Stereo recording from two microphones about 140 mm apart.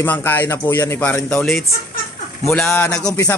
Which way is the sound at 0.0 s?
15° left (ahead or behind).